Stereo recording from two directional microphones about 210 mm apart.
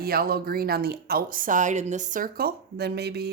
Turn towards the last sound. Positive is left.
turn(degrees=-50)  # may be behind; listen again after turning